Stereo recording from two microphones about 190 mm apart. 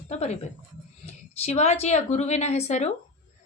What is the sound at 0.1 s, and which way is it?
Speech, 35° left (ahead or behind).